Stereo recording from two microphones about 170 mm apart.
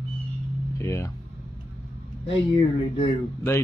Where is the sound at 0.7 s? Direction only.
15° left (ahead or behind).